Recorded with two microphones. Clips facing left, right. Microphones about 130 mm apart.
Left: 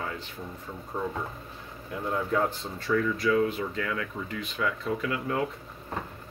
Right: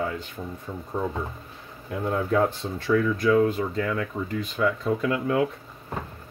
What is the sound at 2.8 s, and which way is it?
Speech, 50° right (ahead or behind).